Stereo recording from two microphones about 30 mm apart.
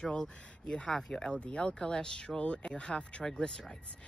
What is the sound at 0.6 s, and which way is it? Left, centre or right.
Speech, left.